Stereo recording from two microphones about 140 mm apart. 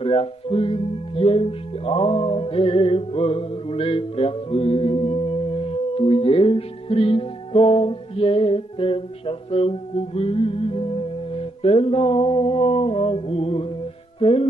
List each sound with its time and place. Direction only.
0.0 s speech: 40° left (ahead or behind)